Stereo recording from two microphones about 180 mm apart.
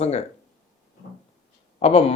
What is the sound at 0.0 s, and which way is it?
Speech, 35° left (ahead or behind).